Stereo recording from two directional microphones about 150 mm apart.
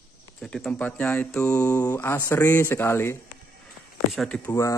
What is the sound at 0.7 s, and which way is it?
Speech, 10° left (ahead or behind).